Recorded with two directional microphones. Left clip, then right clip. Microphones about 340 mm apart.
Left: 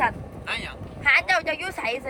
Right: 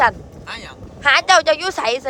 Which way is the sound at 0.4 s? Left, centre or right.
Centre.